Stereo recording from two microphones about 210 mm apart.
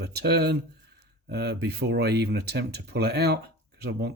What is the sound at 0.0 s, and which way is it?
Speech, 50° right (ahead or behind).